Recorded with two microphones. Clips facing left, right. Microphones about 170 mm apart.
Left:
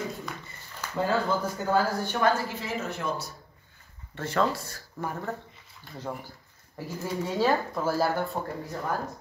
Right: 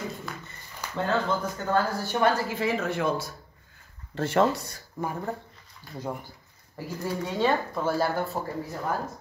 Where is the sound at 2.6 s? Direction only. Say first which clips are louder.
Right 6 dB; 65° right (ahead or behind).